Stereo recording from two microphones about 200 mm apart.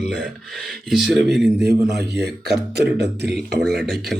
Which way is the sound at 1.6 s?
55° right (ahead or behind).